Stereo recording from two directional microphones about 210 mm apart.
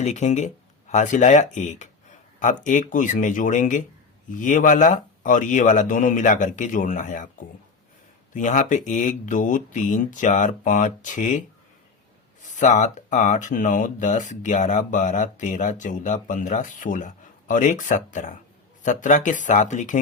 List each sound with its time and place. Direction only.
0.0 s speech: 35° left (ahead or behind)
12.5 s speech: 35° left (ahead or behind)